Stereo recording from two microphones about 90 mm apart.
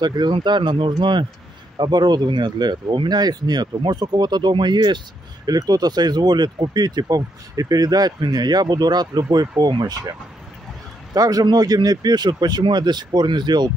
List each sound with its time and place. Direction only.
0.0 s speech: 55° right (ahead or behind)
11.1 s speech: 40° right (ahead or behind)